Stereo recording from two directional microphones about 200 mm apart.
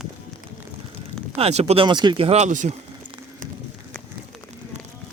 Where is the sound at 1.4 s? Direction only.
30° right (ahead or behind).